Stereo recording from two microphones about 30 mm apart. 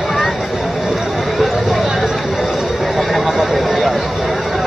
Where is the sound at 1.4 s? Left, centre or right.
Centre.